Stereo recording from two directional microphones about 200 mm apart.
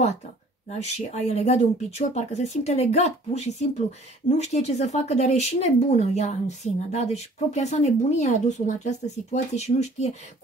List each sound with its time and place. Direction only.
0.7 s speech: 35° left (ahead or behind)